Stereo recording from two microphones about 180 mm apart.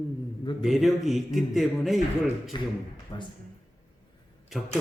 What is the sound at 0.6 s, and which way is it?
A man's voice, centre (ahead or behind).